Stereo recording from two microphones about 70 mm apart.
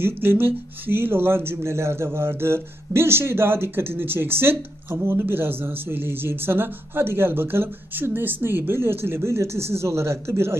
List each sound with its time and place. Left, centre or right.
0.0 s speech: right